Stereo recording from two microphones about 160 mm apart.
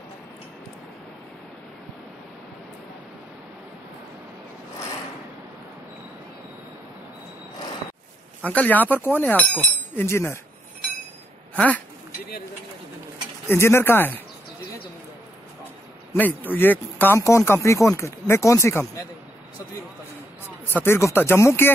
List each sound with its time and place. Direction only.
8.5 s speech: 10° left (ahead or behind)
11.5 s speech: 10° left (ahead or behind)
13.5 s speech: 15° left (ahead or behind)
16.1 s speech: 10° left (ahead or behind)
20.4 s speech: 15° left (ahead or behind)